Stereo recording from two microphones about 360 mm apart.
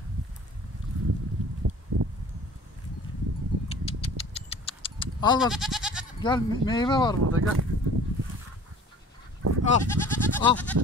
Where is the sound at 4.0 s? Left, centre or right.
Centre.